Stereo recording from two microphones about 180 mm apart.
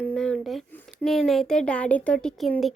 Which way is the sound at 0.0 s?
5° left (ahead or behind).